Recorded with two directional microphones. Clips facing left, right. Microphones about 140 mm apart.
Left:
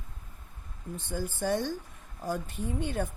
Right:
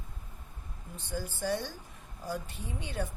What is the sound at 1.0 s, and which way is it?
Speech, 50° left (ahead or behind).